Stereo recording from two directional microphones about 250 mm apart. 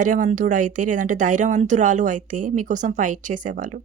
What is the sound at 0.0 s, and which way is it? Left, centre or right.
Speech, right.